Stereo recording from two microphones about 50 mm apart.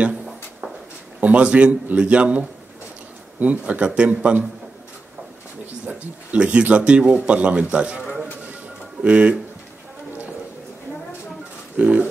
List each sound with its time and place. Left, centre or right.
1.2 s speech: right
5.9 s speech: right
11.7 s a sound: right